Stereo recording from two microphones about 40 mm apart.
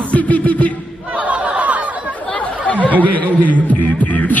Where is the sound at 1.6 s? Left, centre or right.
Right.